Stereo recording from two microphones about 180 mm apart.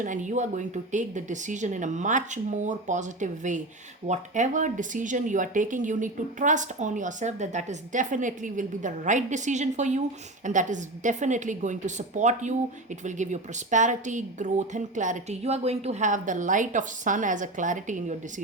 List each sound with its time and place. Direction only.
0.0 s speech: 45° right (ahead or behind)